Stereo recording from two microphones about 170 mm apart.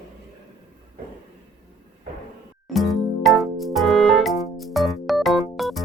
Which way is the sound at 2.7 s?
Centre (ahead or behind).